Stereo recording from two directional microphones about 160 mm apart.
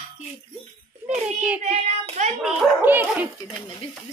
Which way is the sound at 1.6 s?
45° right (ahead or behind).